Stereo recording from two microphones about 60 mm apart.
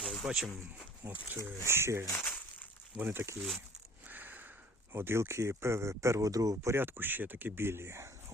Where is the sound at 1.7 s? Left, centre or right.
Right.